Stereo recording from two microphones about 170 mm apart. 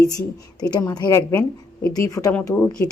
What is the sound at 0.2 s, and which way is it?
Speech, 20° left (ahead or behind).